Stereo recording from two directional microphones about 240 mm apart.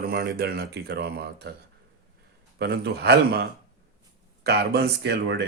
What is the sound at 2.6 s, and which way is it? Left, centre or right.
Speech, right.